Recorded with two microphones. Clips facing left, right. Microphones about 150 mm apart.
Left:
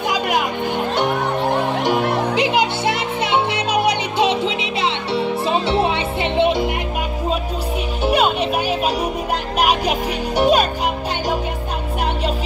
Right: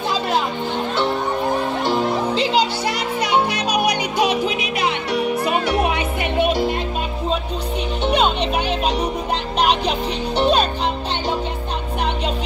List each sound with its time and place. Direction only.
0.1 s music: 15° left (ahead or behind)
2.0 s music: 65° left (ahead or behind)
2.3 s music: 20° left (ahead or behind)
8.0 s music: 5° left (ahead or behind)